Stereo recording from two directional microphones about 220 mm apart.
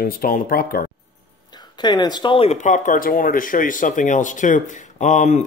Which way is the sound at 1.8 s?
20° left (ahead or behind).